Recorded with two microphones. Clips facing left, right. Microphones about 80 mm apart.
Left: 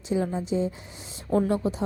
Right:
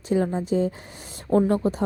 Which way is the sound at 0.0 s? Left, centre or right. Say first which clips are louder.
Right 4 dB; right.